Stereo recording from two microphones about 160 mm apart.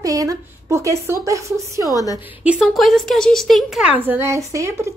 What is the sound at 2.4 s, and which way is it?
Speech, 5° right (ahead or behind).